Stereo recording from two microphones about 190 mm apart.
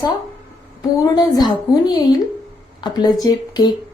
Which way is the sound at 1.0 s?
20° left (ahead or behind).